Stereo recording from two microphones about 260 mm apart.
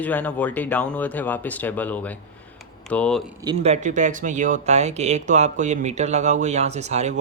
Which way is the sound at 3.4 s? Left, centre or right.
Right.